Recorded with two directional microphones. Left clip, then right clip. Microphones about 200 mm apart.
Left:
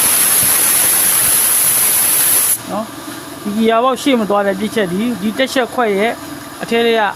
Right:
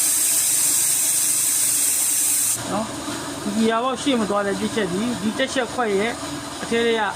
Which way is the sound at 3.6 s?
55° left (ahead or behind).